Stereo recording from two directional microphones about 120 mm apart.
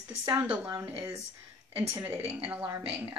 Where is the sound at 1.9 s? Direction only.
20° right (ahead or behind).